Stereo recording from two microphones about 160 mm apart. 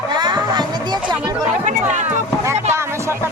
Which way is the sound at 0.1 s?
25° right (ahead or behind).